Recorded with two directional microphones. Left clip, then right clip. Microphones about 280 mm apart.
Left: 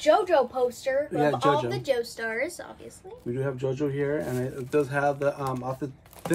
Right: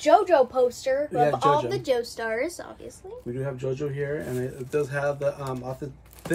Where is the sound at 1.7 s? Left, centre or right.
Centre.